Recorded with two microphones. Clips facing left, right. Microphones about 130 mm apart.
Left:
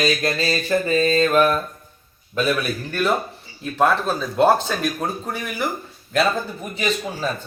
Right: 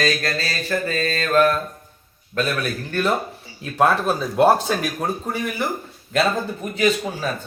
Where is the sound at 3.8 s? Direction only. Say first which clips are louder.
Right 1 dB; 10° right (ahead or behind).